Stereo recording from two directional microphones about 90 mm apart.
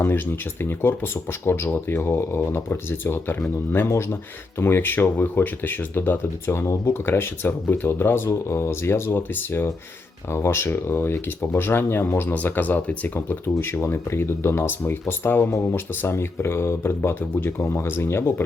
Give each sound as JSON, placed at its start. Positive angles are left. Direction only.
{"t": 0.6, "sound": "speech", "side_deg": 25}